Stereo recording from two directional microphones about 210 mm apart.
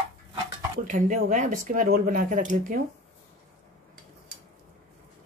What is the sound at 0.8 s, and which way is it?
Speech, 40° right (ahead or behind).